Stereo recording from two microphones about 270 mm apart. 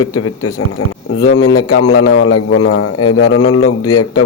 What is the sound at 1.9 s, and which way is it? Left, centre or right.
A man's voice, left.